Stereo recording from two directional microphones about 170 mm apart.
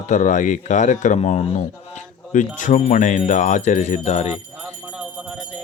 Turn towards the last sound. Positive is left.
turn(degrees=-5)  # may be behind; listen again after turning